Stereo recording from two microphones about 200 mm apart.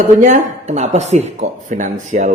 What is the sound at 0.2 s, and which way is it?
Speech, 40° right (ahead or behind).